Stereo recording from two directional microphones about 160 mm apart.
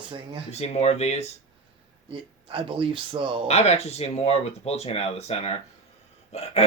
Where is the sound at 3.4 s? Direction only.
40° left (ahead or behind).